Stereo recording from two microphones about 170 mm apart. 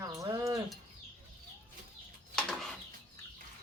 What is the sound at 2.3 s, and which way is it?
Bird, centre (ahead or behind).